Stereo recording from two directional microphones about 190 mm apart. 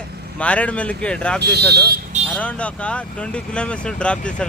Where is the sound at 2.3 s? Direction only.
5° left (ahead or behind).